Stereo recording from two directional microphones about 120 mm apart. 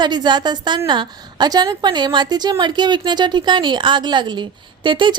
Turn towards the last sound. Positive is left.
turn(degrees=-40)  # may be behind; listen again after turning